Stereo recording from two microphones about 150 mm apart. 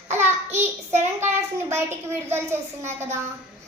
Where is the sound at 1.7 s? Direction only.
15° right (ahead or behind).